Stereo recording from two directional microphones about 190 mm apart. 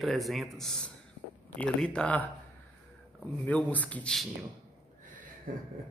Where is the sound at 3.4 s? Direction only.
10° left (ahead or behind).